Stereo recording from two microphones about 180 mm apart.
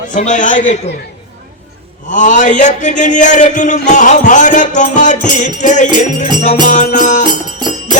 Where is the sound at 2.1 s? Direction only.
45° left (ahead or behind).